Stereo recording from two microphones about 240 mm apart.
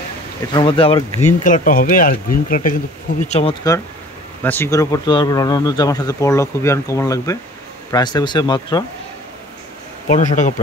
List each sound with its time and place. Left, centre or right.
0.6 s speech: left
4.4 s speech: centre
10.0 s speech: left